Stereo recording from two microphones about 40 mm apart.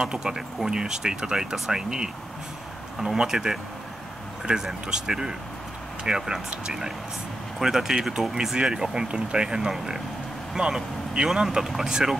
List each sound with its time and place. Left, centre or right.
0.0 s speech: centre